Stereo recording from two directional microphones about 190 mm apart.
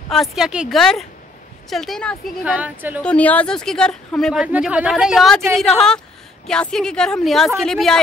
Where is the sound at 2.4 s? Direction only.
5° right (ahead or behind).